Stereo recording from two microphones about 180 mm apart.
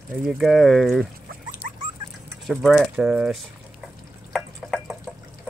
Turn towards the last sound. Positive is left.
turn(degrees=0)  # may be behind; listen again after turning